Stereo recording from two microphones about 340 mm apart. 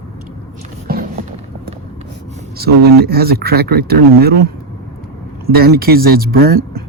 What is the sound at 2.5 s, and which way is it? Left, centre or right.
Speech, right.